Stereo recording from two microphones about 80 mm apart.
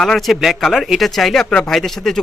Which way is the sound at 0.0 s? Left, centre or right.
Centre.